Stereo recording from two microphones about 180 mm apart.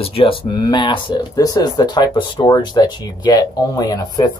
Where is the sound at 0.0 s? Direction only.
30° left (ahead or behind).